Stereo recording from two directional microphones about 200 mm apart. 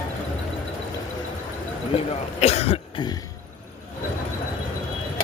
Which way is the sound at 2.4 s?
30° left (ahead or behind).